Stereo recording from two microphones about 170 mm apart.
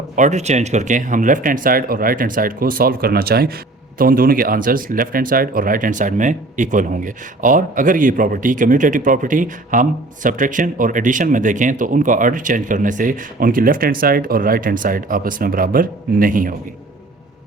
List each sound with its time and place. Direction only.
0.2 s speech: 40° right (ahead or behind)